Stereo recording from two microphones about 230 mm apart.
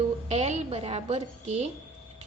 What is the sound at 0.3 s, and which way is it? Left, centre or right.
A woman's voice, right.